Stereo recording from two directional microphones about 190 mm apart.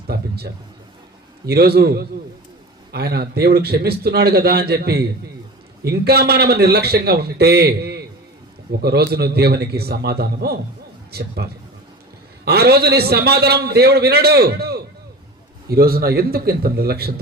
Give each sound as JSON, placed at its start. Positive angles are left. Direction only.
{"t": 0.1, "sound": "a man's voice", "side_deg": -55}